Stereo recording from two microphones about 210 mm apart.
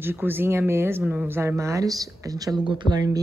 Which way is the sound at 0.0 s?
10° right (ahead or behind).